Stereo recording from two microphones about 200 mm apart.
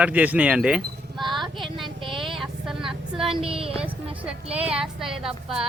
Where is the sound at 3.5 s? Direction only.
30° right (ahead or behind).